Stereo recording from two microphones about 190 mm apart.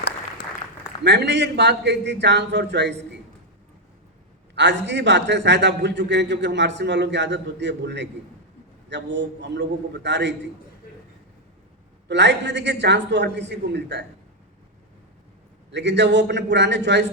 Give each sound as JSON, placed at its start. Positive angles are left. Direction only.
{"t": 1.0, "sound": "a man's voice", "side_deg": -65}
{"t": 4.5, "sound": "a man's voice", "side_deg": -70}
{"t": 12.0, "sound": "a man's voice", "side_deg": -65}
{"t": 15.7, "sound": "a man's voice", "side_deg": -65}